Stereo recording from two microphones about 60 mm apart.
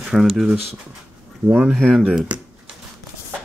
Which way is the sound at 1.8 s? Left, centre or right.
Centre.